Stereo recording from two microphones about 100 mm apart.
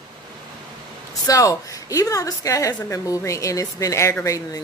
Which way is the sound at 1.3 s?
35° left (ahead or behind).